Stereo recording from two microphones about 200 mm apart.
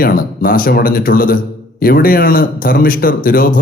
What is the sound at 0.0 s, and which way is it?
Speech, 45° left (ahead or behind).